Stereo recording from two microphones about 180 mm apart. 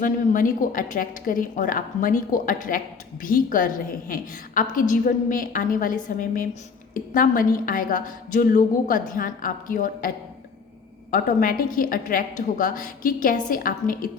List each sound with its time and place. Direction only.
0.0 s a woman's voice: 50° left (ahead or behind)
11.1 s a woman's voice: 50° left (ahead or behind)